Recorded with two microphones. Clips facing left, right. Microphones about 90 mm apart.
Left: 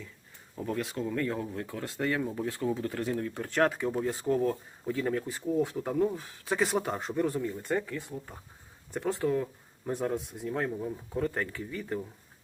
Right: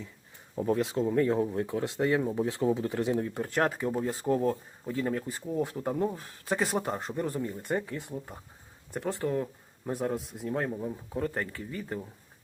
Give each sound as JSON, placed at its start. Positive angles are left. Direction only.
{"t": 0.5, "sound": "speech", "side_deg": -25}
{"t": 4.3, "sound": "speech", "side_deg": -20}
{"t": 5.3, "sound": "speech", "side_deg": 0}
{"t": 7.6, "sound": "speech", "side_deg": -15}
{"t": 8.9, "sound": "speech", "side_deg": 0}